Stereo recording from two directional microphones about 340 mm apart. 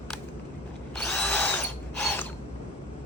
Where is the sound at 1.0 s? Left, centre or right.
Centre.